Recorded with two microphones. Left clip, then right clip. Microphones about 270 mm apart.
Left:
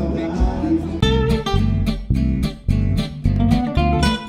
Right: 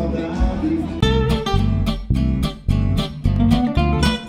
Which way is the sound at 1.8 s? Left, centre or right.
Right.